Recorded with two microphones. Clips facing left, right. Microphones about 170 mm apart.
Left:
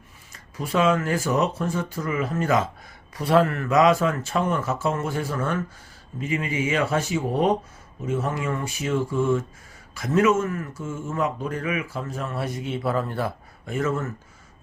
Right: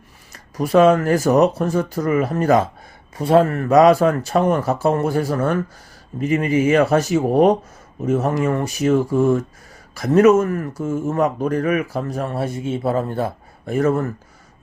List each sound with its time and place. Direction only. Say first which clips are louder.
0.5 s speech: right 8 dB; 40° right (ahead or behind)
3.2 s speech: right 5 dB; 25° right (ahead or behind)
12.3 s a man's voice: right 5 dB; 30° right (ahead or behind)